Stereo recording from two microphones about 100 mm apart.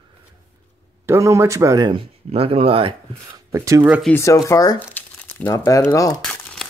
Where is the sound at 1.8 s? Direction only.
55° right (ahead or behind).